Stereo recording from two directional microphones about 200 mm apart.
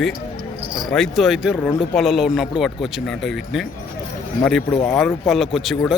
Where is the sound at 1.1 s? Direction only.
Centre (ahead or behind).